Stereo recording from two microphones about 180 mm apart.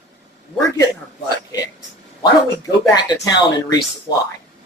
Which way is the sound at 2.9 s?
20° left (ahead or behind).